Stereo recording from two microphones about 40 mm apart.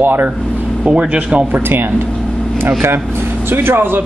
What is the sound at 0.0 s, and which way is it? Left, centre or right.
Speech, right.